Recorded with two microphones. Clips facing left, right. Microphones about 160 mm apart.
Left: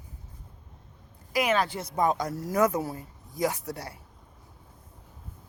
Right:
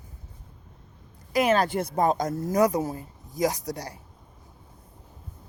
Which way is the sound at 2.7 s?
15° right (ahead or behind).